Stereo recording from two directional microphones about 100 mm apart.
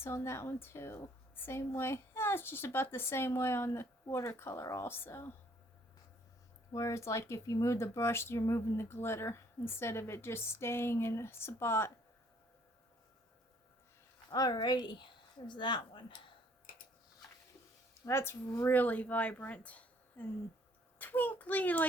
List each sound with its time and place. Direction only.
0.0 s a woman's voice: 25° left (ahead or behind)
6.7 s a woman's voice: 30° left (ahead or behind)
14.3 s a woman's voice: 40° left (ahead or behind)
18.0 s speech: 25° left (ahead or behind)